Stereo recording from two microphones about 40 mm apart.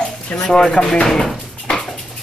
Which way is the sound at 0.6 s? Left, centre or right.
Left.